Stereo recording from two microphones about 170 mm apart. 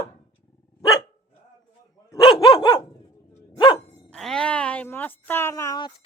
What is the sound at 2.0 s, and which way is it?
Dog, 25° left (ahead or behind).